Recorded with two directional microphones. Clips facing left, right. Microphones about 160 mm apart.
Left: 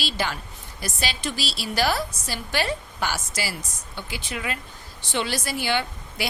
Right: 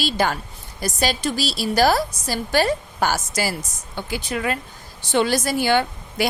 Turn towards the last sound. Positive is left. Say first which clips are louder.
# right 7 dB
turn(degrees=-45)  # may be behind; listen again after turning